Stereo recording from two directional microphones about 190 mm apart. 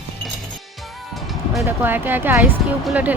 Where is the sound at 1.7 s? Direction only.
10° right (ahead or behind).